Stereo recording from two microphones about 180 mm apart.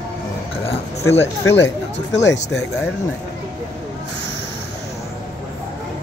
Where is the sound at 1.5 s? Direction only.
80° left.